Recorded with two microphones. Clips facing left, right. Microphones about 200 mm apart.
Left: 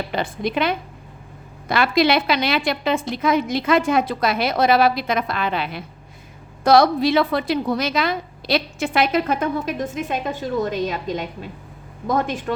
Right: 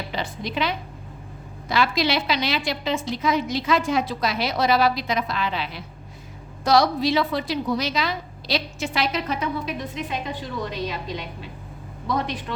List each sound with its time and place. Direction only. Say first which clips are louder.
0.1 s a woman's voice: left 5 dB; 55° left (ahead or behind)